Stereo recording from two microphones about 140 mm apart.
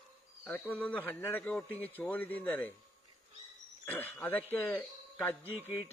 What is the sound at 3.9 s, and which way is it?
Speech, 15° left (ahead or behind).